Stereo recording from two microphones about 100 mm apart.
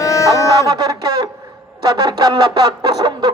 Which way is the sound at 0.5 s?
40° right (ahead or behind).